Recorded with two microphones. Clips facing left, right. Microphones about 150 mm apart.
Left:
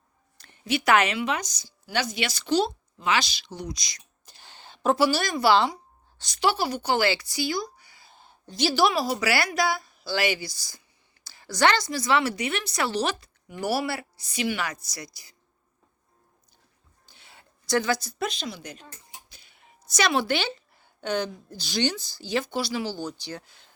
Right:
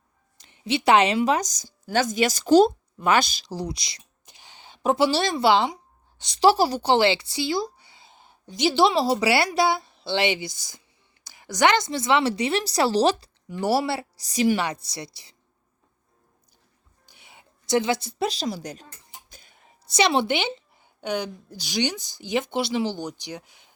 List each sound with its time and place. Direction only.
0.3 s a woman's voice: 20° right (ahead or behind); by 3.2 s 50° right (ahead or behind)
3.5 s speech: 30° right (ahead or behind)
4.4 s speech: 15° right (ahead or behind)
17.1 s a woman's voice: 15° right (ahead or behind); by 18.9 s 40° right (ahead or behind)
19.3 s a sound: 45° right (ahead or behind)
19.9 s a woman's voice: 25° right (ahead or behind)